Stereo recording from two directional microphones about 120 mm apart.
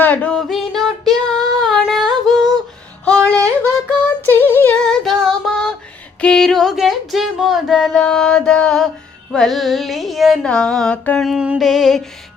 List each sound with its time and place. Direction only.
0.0 s female singing: 10° left (ahead or behind)
3.0 s yodeling: 10° left (ahead or behind)
4.3 s female singing: 20° left (ahead or behind)
4.8 s female singing: 5° left (ahead or behind)
6.2 s a sound: 5° left (ahead or behind)
9.3 s carnatic music: centre (ahead or behind)
11.2 s carnatic music: 5° right (ahead or behind)